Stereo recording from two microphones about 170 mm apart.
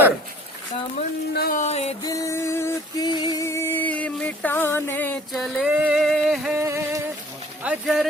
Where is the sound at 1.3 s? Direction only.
70° left (ahead or behind).